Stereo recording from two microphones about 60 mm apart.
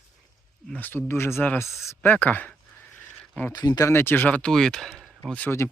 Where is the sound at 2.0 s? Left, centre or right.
Left.